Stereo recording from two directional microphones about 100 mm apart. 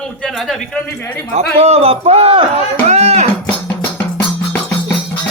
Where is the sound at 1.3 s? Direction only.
90° right.